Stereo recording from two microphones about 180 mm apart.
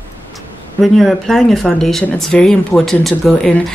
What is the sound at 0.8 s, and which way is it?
Speech, centre (ahead or behind).